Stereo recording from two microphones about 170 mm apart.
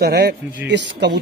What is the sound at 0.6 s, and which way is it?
Speech, 90° right.